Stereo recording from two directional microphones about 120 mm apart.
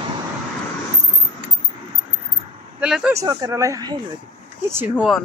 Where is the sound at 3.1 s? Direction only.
30° right (ahead or behind).